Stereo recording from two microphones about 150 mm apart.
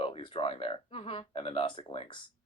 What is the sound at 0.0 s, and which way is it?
Speech, 35° left (ahead or behind).